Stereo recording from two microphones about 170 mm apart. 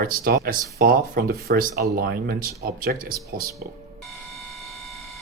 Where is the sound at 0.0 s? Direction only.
60° right (ahead or behind).